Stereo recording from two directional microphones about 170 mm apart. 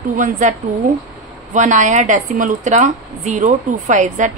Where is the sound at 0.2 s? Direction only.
50° right (ahead or behind).